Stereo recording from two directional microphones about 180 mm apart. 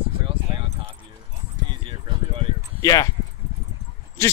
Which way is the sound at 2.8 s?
20° left (ahead or behind).